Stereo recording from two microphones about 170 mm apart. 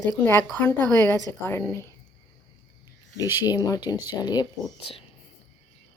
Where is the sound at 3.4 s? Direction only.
20° left (ahead or behind).